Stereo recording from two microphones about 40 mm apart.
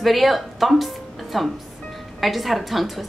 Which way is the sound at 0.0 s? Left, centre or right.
Centre.